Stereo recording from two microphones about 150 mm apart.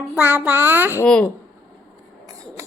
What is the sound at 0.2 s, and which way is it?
Speech, 15° right (ahead or behind).